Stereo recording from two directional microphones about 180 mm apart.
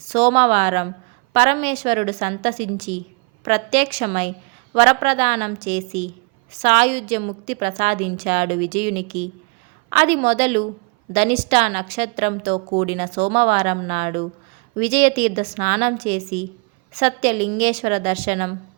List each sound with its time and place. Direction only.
0.0 s a woman's voice: 35° right (ahead or behind)